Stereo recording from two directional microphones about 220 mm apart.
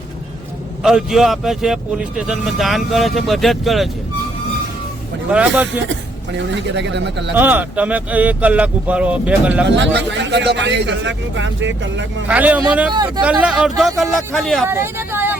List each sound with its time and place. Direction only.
0.8 s speech: centre (ahead or behind)
5.3 s speech: 5° right (ahead or behind)
6.3 s a man's voice: 55° right (ahead or behind)
7.3 s speech: 10° right (ahead or behind)
9.6 s a man's voice: 50° right (ahead or behind)
12.3 s speech: 5° right (ahead or behind)
12.9 s speech: 20° right (ahead or behind)
13.4 s speech: 5° right (ahead or behind)
14.7 s speech: 10° right (ahead or behind)